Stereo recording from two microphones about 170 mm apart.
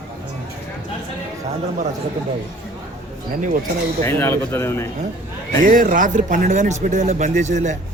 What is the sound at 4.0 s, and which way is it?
Speech, 15° left (ahead or behind).